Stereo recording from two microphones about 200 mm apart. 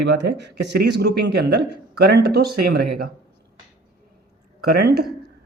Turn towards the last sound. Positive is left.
turn(degrees=-50)  # may be behind; listen again after turning